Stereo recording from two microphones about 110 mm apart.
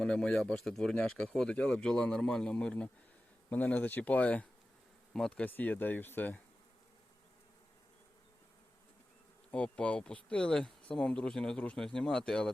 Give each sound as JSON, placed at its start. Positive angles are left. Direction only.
{"t": 0.0, "sound": "speech", "side_deg": 5}
{"t": 9.5, "sound": "speech", "side_deg": 10}